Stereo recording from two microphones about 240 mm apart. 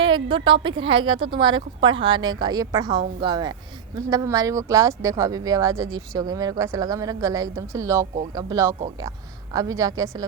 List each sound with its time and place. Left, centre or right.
0.0 s a woman's voice: right